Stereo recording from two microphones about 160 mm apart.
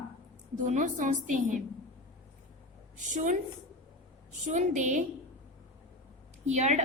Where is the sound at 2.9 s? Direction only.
50° right (ahead or behind).